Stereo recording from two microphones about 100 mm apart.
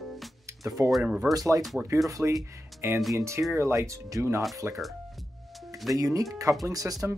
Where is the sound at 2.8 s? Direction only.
25° right (ahead or behind).